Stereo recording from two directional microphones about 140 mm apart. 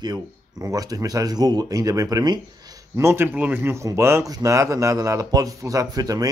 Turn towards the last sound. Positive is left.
turn(degrees=-25)  # may be behind; listen again after turning